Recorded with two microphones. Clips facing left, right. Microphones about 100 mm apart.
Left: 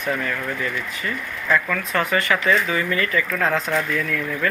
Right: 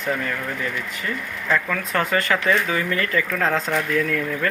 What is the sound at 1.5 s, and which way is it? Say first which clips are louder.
Speech: left 1 dB; 20° right (ahead or behind).